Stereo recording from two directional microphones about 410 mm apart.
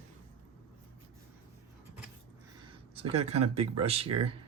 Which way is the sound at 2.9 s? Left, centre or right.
Centre.